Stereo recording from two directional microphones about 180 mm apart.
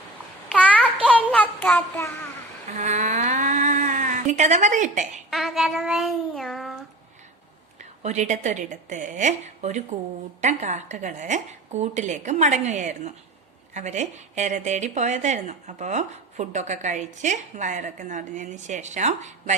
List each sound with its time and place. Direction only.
1.0 s a sound: 5° left (ahead or behind)
2.7 s speech: 40° right (ahead or behind)
5.3 s child singing: centre (ahead or behind)
7.8 s a woman's voice: 40° right (ahead or behind)